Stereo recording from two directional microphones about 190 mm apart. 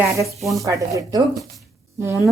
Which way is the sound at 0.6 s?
15° right (ahead or behind).